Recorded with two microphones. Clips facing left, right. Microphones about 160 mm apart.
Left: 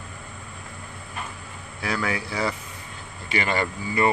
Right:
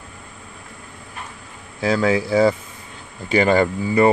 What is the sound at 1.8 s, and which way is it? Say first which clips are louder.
Speech: right 9 dB; 25° right (ahead or behind).